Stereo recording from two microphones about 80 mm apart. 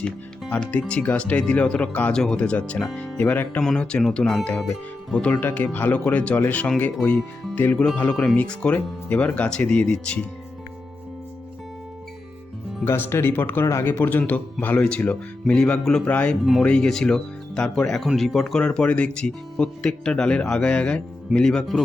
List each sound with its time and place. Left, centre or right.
0.5 s speech: centre
3.6 s speech: centre
5.2 s speech: left
12.8 s speech: left; by 18.6 s centre
18.6 s speech: centre